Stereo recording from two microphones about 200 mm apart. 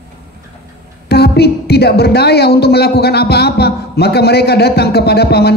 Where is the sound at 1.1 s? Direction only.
55° left (ahead or behind).